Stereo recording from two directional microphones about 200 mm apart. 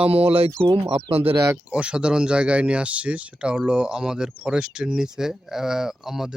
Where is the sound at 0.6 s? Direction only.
30° right (ahead or behind).